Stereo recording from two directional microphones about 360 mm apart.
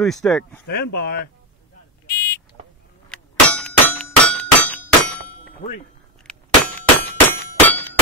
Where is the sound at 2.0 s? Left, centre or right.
Left.